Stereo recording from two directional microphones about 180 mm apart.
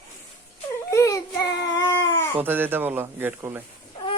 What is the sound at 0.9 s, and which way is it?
Baby cry, 15° left (ahead or behind).